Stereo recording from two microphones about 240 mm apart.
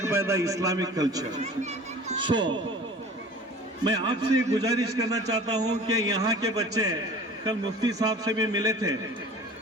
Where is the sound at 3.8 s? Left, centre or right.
Right.